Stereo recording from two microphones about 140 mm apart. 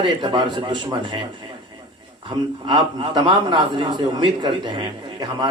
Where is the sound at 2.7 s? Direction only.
35° right (ahead or behind).